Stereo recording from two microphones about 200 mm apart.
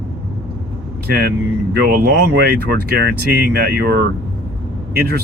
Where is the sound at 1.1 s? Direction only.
50° right (ahead or behind).